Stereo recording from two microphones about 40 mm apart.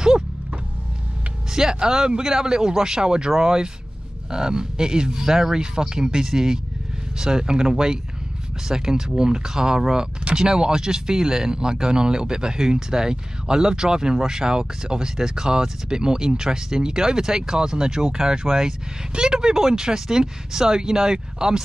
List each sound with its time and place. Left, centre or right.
1.5 s speech: centre